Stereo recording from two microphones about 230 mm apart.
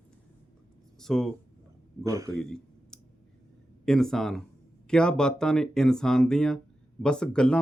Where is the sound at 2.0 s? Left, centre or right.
Centre.